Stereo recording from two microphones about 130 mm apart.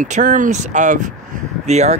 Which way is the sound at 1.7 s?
60° right (ahead or behind).